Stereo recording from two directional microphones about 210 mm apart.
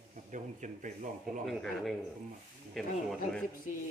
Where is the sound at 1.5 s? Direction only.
Centre (ahead or behind).